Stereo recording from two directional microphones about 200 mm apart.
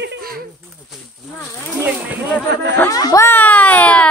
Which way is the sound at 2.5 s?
60° right (ahead or behind).